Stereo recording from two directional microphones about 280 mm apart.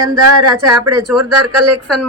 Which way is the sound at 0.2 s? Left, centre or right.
Right.